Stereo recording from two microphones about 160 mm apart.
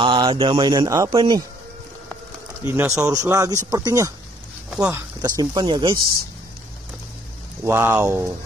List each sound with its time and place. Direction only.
0.0 s speech: 30° right (ahead or behind)
2.6 s speech: 15° right (ahead or behind); by 5.9 s 30° right (ahead or behind)
7.6 s speech: 15° right (ahead or behind)